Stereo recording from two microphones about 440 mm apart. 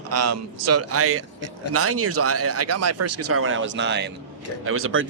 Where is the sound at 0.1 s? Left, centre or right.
Right.